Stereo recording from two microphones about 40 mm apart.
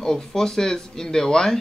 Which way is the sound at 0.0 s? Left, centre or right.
Centre.